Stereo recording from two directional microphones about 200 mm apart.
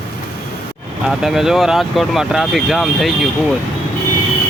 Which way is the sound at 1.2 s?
Centre (ahead or behind).